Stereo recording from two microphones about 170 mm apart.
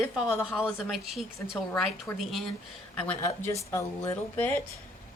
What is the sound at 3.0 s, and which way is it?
Speech, 10° left (ahead or behind).